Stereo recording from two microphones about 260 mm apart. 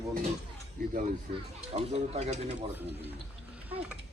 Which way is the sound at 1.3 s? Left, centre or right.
Right.